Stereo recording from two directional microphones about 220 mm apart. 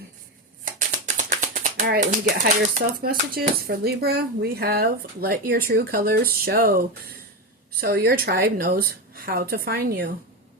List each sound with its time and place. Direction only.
0.6 s a woman's voice: 35° right (ahead or behind)